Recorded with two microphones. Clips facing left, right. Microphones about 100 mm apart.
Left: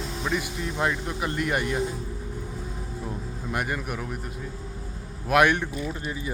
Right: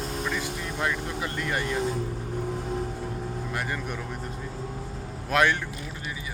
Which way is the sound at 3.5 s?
15° left (ahead or behind).